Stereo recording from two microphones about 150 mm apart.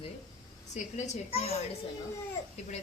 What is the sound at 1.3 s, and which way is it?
Speech, 45° left (ahead or behind).